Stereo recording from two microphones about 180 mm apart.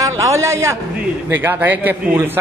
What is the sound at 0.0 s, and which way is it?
A man's voice, 15° right (ahead or behind).